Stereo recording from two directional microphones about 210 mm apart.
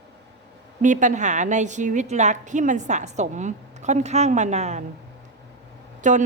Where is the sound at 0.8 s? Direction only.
35° right (ahead or behind).